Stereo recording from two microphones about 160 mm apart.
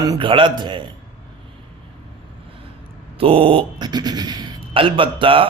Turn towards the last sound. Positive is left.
turn(degrees=-35)  # may be behind; listen again after turning